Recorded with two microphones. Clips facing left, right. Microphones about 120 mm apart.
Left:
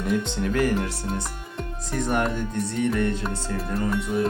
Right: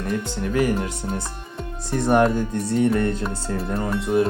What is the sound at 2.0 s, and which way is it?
Speech, 35° right (ahead or behind).